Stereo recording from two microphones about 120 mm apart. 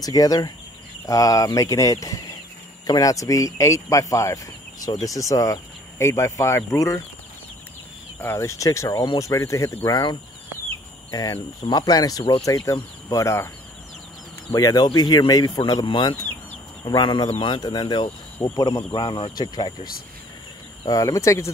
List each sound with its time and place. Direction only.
0.0 s speech: 30° left (ahead or behind)
8.2 s speech: 20° left (ahead or behind)
14.5 s speech: 30° left (ahead or behind)